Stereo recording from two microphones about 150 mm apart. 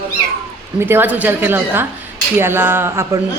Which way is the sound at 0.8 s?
15° right (ahead or behind).